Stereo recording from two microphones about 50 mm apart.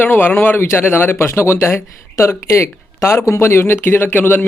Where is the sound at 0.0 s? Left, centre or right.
Left.